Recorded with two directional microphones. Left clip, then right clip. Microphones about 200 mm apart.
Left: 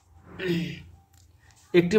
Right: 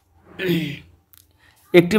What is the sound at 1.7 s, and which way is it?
Speech, 45° right (ahead or behind).